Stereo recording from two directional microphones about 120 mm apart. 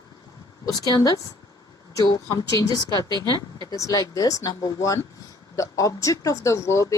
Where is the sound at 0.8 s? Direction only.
35° left (ahead or behind).